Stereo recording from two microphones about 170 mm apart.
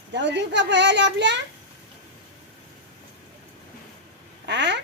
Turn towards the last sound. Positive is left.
turn(degrees=-90)